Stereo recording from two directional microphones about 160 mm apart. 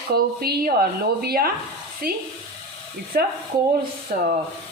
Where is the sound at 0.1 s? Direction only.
75° right (ahead or behind).